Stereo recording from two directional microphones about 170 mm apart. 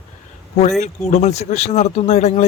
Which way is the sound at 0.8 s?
40° left (ahead or behind).